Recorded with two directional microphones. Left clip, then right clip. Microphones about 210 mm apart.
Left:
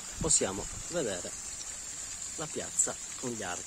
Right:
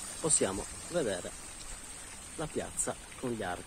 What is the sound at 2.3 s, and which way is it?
Speech, 5° left (ahead or behind).